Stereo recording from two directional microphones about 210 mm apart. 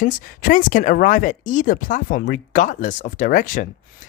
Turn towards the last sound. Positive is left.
turn(degrees=40)  # may be behind; listen again after turning